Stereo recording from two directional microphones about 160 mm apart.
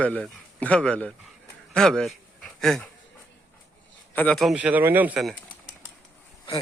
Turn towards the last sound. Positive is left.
turn(degrees=35)  # may be behind; listen again after turning